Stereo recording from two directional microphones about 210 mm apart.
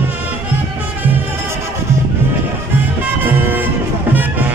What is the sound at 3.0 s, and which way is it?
Music, 10° right (ahead or behind).